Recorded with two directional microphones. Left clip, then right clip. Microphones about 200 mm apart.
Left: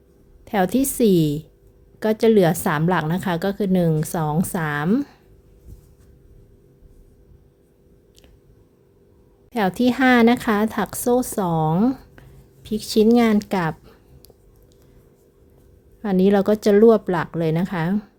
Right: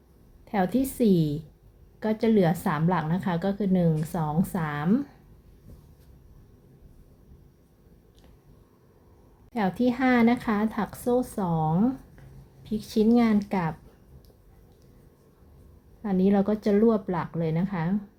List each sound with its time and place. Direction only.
0.4 s a woman's voice: 50° left (ahead or behind)
9.5 s a woman's voice: 45° left (ahead or behind)
16.0 s a woman's voice: 50° left (ahead or behind)